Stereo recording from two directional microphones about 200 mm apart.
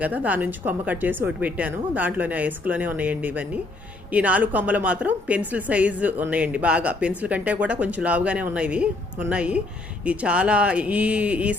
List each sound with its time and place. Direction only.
0.0 s a woman's voice: 10° right (ahead or behind)